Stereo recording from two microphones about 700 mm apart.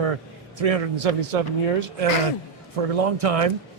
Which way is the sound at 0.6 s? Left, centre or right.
Right.